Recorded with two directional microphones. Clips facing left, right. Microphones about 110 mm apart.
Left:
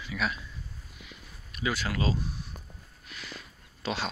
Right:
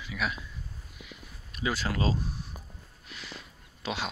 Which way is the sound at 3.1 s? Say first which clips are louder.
Even; 25° right (ahead or behind).